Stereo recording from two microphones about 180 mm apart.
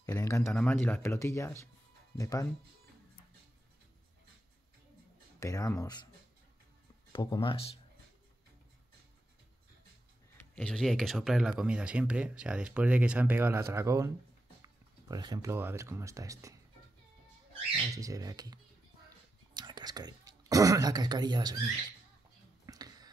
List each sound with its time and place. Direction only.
0.0 s speech: 15° left (ahead or behind)
5.4 s speech: 15° left (ahead or behind)
7.1 s speech: 25° left (ahead or behind)
10.3 s speech: 5° left (ahead or behind); by 16.5 s 15° right (ahead or behind)
17.8 s speech: 20° right (ahead or behind)
22.7 s a sound: 20° right (ahead or behind)